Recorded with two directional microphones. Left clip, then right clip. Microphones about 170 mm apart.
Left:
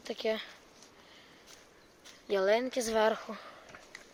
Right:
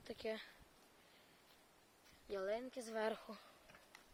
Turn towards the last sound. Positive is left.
turn(degrees=-10)  # may be behind; listen again after turning